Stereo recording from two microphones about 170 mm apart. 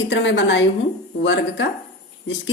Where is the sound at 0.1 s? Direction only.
90° left.